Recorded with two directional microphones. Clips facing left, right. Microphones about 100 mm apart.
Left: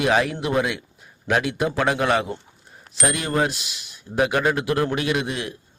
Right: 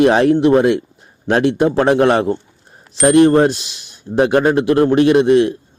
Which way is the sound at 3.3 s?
30° right (ahead or behind).